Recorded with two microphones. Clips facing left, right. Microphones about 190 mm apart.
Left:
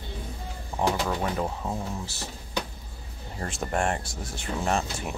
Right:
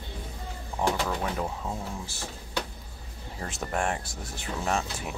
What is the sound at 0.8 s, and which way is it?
Speech, 10° left (ahead or behind).